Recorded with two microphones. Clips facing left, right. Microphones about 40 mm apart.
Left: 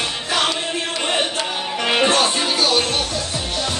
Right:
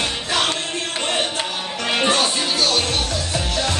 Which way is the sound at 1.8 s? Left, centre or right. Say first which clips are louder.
Left 2 dB; centre.